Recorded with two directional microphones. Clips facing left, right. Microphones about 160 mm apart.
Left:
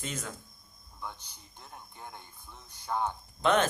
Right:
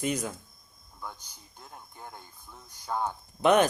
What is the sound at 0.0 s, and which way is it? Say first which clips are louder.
Speech: right 9 dB; 15° right (ahead or behind).